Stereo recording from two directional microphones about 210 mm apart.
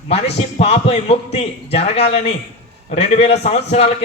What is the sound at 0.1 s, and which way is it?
A man's voice, 30° left (ahead or behind).